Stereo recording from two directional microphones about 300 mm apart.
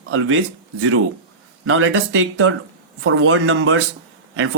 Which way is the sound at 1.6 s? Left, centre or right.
Right.